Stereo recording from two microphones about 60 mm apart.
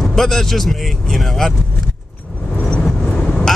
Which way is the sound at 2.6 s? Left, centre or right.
Centre.